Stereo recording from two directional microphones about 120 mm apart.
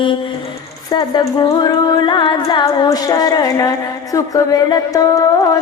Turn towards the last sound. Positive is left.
turn(degrees=30)  # may be behind; listen again after turning